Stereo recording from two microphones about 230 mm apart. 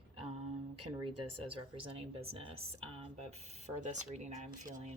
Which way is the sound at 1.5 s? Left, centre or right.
Right.